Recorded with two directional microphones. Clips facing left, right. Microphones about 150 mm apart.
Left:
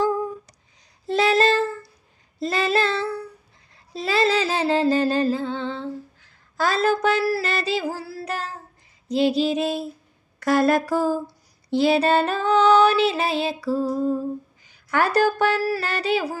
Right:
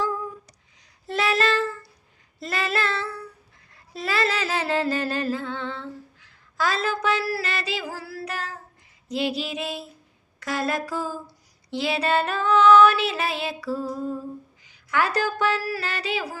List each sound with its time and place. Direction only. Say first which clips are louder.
1.0 s female singing: left 5 dB; 30° left (ahead or behind)
3.9 s humming: left 5 dB; 30° left (ahead or behind)
6.1 s a sound: right 2 dB; 40° left (ahead or behind)
6.8 s a sound: left 5 dB; 50° left (ahead or behind)
7.3 s music: left 5 dB; 40° left (ahead or behind)
7.9 s child singing: left 5 dB; 25° left (ahead or behind)
8.2 s child singing: left 2 dB; 40° left (ahead or behind)
9.1 s music: left 7 dB; 35° left (ahead or behind)
10.4 s a sound: left 8 dB; 55° left (ahead or behind)
11.7 s music: left 6 dB; 45° left (ahead or behind)
14.8 s speech: left 5 dB; 50° left (ahead or behind)
15.8 s a sound: left 5 dB; 50° left (ahead or behind)